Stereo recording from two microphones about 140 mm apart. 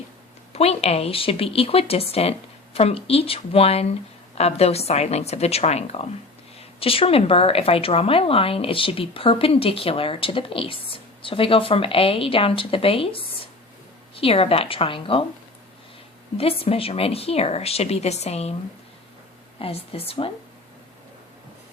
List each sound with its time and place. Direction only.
0.5 s speech: 45° left (ahead or behind)
16.4 s speech: 45° left (ahead or behind)
19.5 s speech: 45° left (ahead or behind)